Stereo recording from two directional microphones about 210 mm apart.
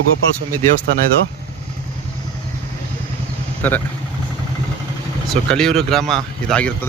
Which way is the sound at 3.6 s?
10° left (ahead or behind).